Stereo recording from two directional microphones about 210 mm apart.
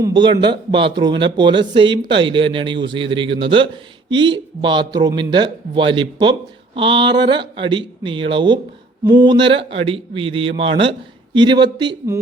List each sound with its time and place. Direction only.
0.0 s speech: 20° right (ahead or behind)